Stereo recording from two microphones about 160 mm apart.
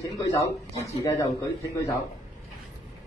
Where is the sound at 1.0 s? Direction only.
20° left (ahead or behind).